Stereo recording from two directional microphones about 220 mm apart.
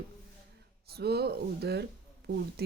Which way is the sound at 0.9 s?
45° right (ahead or behind).